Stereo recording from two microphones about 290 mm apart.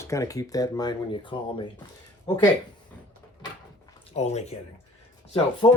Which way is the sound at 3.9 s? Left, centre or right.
Left.